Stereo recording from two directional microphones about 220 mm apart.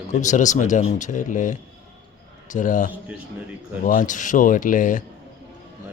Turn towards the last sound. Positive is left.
turn(degrees=35)  # may be behind; listen again after turning